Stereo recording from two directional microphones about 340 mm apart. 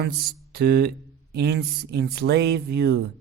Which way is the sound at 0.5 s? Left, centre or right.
Right.